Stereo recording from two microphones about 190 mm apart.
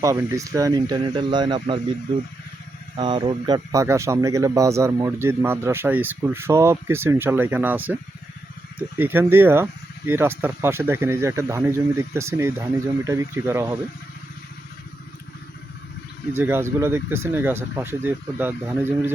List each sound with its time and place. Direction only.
0.0 s a man's voice: 15° right (ahead or behind)
3.0 s a man's voice: 25° right (ahead or behind); by 7.9 s 10° right (ahead or behind)
9.0 s a man's voice: 10° right (ahead or behind)
16.3 s a man's voice: 10° right (ahead or behind)